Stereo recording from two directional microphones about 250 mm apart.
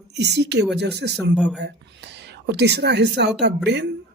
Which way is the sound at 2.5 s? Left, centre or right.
Right.